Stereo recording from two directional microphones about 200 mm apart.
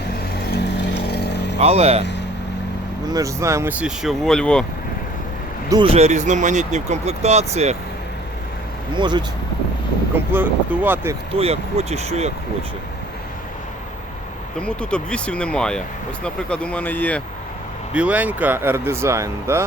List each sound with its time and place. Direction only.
1.0 s vehicle: 55° left (ahead or behind)
1.6 s speech: 30° right (ahead or behind)
3.1 s speech: 15° right (ahead or behind); by 4.6 s 5° left (ahead or behind)
5.6 s speech: 25° right (ahead or behind)
9.0 s speech: 20° right (ahead or behind)
10.3 s speech: 10° right (ahead or behind)
11.3 s speech: 30° right (ahead or behind)
14.6 s speech: 5° left (ahead or behind)
17.9 s speech: 5° right (ahead or behind)